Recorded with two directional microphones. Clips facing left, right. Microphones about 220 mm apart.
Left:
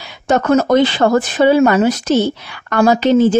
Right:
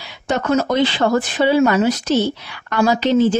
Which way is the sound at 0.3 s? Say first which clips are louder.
Left 5 dB; 50° left (ahead or behind).